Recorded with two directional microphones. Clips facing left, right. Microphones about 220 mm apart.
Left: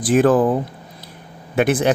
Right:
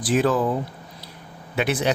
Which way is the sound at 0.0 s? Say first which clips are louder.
Left 6 dB; 50° left (ahead or behind).